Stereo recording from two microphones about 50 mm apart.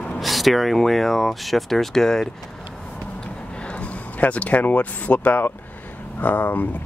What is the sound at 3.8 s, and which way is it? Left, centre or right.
Speech, left.